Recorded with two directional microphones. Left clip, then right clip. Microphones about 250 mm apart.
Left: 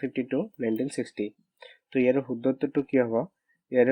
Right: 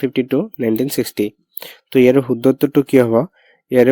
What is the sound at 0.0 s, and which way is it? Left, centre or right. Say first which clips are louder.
Speech: right 11 dB; right.